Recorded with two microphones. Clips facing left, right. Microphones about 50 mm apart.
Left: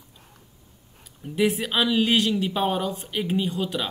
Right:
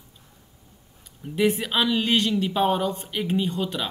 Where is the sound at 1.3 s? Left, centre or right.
Centre.